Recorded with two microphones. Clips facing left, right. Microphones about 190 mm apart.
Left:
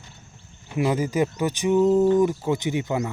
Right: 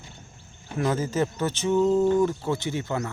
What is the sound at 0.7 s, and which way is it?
Speech, 10° left (ahead or behind).